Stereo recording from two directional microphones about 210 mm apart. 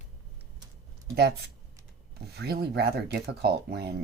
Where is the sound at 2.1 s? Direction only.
50° right (ahead or behind).